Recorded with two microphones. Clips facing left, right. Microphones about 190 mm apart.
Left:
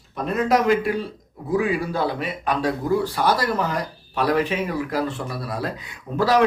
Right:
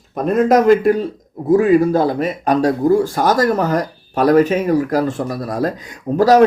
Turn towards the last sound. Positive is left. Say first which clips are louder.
# right 8 dB
turn(degrees=-40)  # may be behind; listen again after turning